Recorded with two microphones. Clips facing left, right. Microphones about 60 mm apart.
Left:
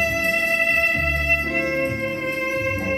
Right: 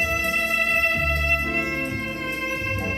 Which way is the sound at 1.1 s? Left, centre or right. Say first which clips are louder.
Left 2 dB; left.